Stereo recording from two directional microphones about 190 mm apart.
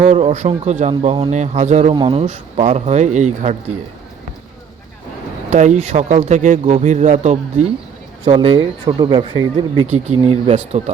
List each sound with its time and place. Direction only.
0.0 s speech: 35° right (ahead or behind)
5.5 s speech: 40° right (ahead or behind)